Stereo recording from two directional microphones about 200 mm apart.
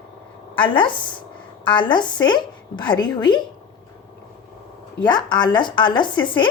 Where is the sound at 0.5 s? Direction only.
25° left (ahead or behind).